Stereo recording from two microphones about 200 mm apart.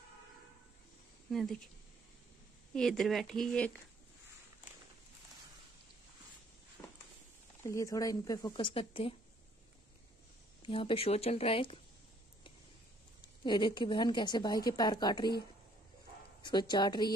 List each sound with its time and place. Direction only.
1.3 s speech: centre (ahead or behind)
2.7 s speech: centre (ahead or behind)
7.6 s a woman's voice: 15° left (ahead or behind)
10.6 s a woman's voice: 25° left (ahead or behind)
13.4 s a woman's voice: 25° left (ahead or behind)
16.4 s a woman's voice: 20° left (ahead or behind)